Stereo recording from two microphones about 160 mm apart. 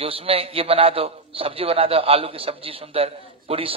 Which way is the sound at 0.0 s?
35° right (ahead or behind).